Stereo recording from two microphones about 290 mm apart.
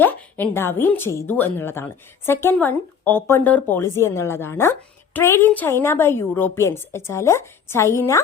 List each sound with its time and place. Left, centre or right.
0.0 s a woman's voice: centre